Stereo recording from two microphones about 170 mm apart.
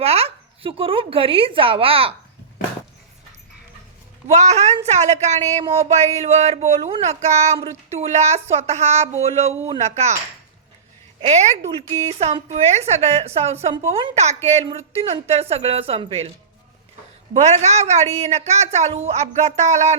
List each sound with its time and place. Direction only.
0.0 s speech: 35° right (ahead or behind)
4.4 s speech: 40° right (ahead or behind)
11.3 s speech: 40° right (ahead or behind)
17.3 s speech: 40° right (ahead or behind)